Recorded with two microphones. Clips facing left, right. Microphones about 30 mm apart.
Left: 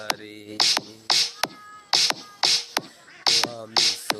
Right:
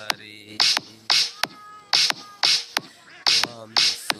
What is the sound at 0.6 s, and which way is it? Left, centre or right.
Music, right.